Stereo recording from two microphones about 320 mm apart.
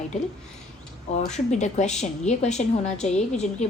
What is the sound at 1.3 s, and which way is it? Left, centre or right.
A woman's voice, left.